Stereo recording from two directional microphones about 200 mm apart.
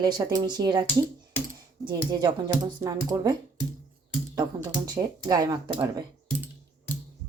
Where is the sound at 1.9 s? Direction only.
20° right (ahead or behind).